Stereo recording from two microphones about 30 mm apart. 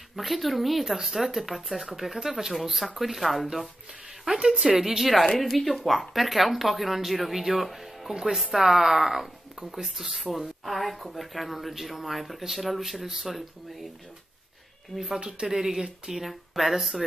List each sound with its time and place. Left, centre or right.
0.1 s speech: centre
4.5 s speech: centre
5.4 s speech: centre
9.6 s speech: centre
14.9 s speech: centre
15.4 s speech: centre
16.3 s speech: centre